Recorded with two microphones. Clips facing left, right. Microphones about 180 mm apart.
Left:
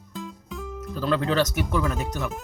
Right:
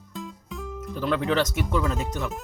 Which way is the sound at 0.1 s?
Centre (ahead or behind).